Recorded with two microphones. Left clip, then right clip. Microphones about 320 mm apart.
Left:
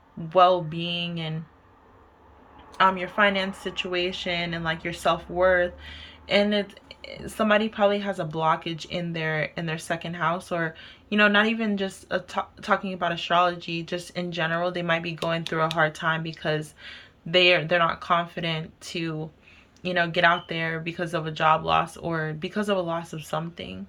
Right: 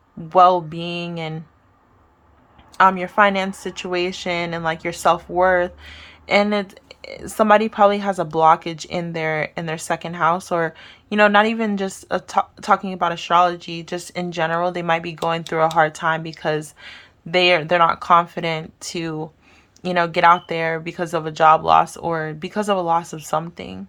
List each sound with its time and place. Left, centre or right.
0.3 s a woman's voice: centre
2.7 s a woman's voice: centre